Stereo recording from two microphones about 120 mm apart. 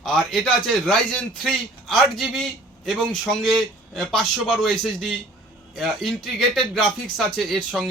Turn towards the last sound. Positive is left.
turn(degrees=5)  # may be behind; listen again after turning